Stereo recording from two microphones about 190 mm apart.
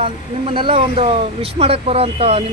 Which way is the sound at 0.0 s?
30° right (ahead or behind).